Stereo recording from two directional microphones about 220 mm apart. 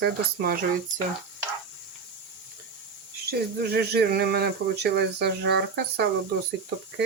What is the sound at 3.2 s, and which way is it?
Speech, 45° right (ahead or behind).